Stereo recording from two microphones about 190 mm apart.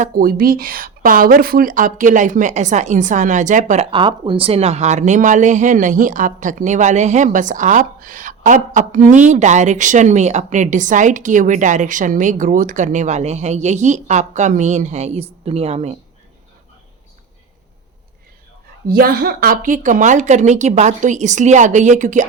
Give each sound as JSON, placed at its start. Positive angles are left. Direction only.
{"t": 0.0, "sound": "a woman's voice", "side_deg": -50}
{"t": 3.9, "sound": "speech", "side_deg": -25}
{"t": 18.9, "sound": "speech", "side_deg": -50}